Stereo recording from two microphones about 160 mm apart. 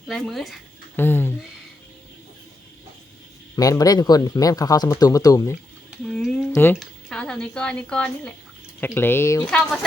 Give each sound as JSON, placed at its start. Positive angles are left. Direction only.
{"t": 0.1, "sound": "speech", "side_deg": 0}
{"t": 0.9, "sound": "speech", "side_deg": 15}
{"t": 3.5, "sound": "speech", "side_deg": 25}
{"t": 6.1, "sound": "a sound", "side_deg": 0}
{"t": 6.7, "sound": "speech", "side_deg": 5}
{"t": 9.5, "sound": "speech", "side_deg": 5}